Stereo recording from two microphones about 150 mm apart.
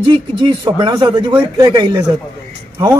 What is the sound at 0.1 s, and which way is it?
Speech, 30° right (ahead or behind).